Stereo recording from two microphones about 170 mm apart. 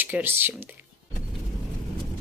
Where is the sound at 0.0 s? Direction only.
10° right (ahead or behind).